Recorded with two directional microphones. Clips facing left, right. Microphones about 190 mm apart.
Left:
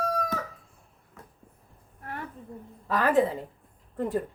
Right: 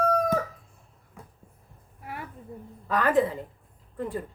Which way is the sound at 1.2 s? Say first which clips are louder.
Right 2 dB; 10° right (ahead or behind).